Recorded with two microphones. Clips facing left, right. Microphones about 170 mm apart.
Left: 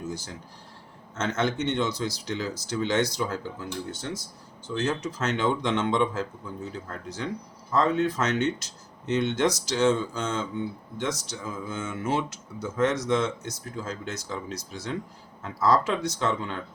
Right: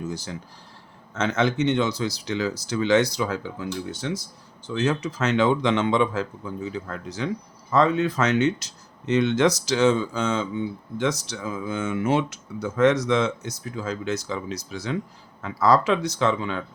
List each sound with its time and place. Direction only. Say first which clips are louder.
1.1 s speech: right 4 dB; 70° right (ahead or behind)
4.7 s speech: right 4 dB; 70° right (ahead or behind)
7.7 s speech: right 3 dB; 70° right (ahead or behind)